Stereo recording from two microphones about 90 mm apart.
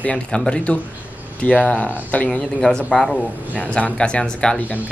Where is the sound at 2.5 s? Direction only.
5° left (ahead or behind).